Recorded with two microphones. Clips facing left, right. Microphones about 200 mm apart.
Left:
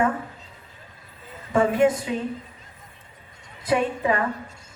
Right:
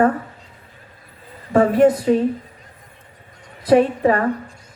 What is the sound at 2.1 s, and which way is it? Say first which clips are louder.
Speech: right 11 dB; 45° right (ahead or behind).